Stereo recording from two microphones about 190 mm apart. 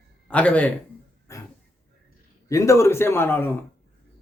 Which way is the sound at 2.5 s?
15° left (ahead or behind).